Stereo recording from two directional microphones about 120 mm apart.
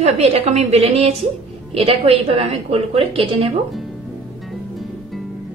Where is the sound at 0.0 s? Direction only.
60° right (ahead or behind).